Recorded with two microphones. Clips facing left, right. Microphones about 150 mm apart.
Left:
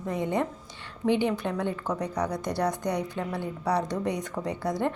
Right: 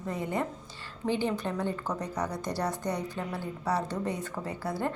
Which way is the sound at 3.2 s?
10° right (ahead or behind).